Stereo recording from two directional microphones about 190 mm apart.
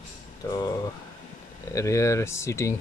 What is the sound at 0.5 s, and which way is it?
Speech, 20° left (ahead or behind).